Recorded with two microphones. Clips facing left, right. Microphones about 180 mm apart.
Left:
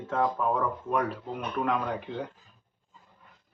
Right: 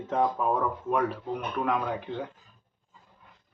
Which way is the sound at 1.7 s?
Centre (ahead or behind).